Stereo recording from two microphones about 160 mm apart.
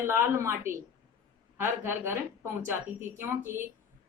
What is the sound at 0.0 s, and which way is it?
A woman's voice, 15° right (ahead or behind).